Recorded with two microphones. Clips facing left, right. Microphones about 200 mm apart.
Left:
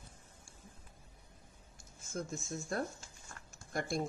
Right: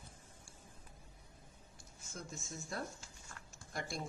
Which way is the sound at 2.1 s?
50° left (ahead or behind).